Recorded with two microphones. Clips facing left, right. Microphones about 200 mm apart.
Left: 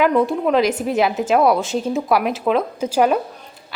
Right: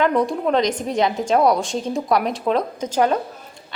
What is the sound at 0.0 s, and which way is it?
A woman's voice, 5° left (ahead or behind).